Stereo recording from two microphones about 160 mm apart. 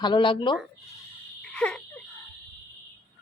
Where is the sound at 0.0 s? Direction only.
30° left (ahead or behind).